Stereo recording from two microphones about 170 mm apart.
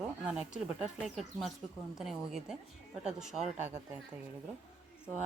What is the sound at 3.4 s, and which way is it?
Speech, 45° right (ahead or behind).